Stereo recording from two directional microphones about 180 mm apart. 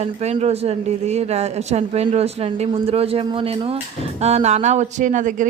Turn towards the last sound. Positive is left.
turn(degrees=-45)  # may be behind; listen again after turning